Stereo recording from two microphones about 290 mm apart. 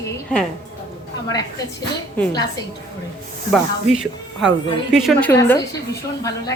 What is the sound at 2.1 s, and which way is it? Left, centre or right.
Speech, centre.